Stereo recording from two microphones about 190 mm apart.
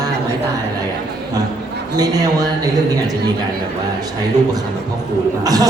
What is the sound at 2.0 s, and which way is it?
Speech, 20° right (ahead or behind).